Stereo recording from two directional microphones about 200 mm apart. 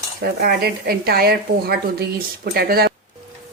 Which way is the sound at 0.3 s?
50° right (ahead or behind).